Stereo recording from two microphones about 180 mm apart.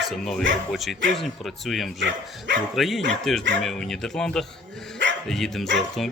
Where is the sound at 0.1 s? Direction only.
Centre (ahead or behind).